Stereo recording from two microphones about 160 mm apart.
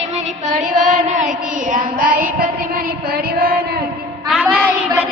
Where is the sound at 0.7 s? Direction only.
50° right (ahead or behind).